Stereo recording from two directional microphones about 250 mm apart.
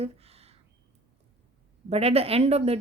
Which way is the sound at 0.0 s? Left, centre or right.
Right.